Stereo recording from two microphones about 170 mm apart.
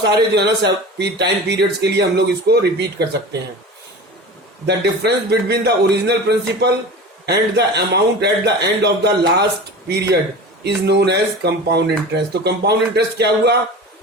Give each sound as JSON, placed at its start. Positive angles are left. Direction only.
{"t": 0.0, "sound": "a man's voice", "side_deg": -80}
{"t": 4.6, "sound": "a man's voice", "side_deg": -75}